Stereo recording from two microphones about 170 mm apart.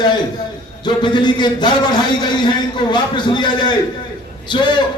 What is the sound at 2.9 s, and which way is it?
A man's voice, 25° left (ahead or behind).